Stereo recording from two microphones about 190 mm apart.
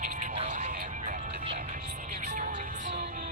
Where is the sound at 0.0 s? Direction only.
40° right (ahead or behind).